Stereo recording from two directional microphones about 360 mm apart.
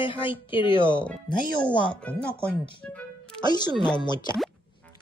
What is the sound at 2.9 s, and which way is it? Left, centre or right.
Music, centre.